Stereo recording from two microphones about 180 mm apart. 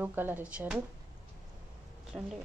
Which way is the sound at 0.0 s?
10° right (ahead or behind).